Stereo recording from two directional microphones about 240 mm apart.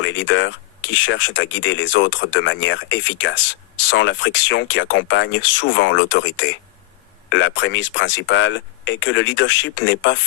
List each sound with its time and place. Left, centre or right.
0.0 s speech: left